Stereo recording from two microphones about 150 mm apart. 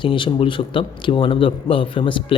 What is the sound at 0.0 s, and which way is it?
Speech, 35° left (ahead or behind).